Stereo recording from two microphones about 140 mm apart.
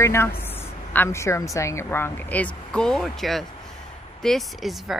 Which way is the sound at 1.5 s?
20° left (ahead or behind).